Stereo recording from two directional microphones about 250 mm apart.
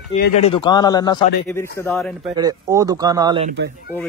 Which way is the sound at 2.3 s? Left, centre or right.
Centre.